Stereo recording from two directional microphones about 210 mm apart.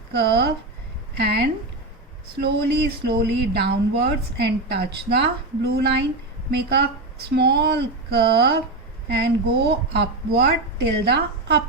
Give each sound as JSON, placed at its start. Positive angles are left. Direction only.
{"t": 0.1, "sound": "a woman's voice", "side_deg": -50}